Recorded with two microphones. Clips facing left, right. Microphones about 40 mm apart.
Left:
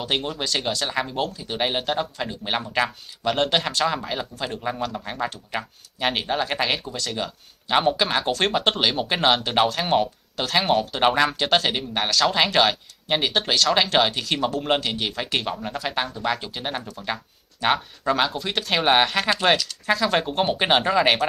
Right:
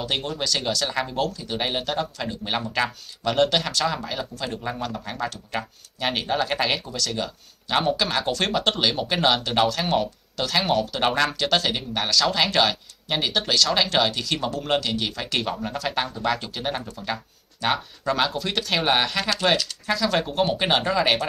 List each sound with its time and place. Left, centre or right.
0.0 s speech: centre